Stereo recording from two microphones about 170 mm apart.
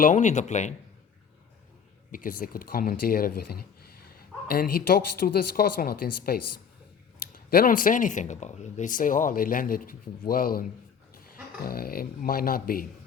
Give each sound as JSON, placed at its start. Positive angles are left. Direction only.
{"t": 0.0, "sound": "speech", "side_deg": 45}
{"t": 2.1, "sound": "speech", "side_deg": 55}